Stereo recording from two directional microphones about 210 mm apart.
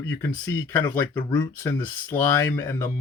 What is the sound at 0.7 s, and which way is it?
Speech, 10° left (ahead or behind).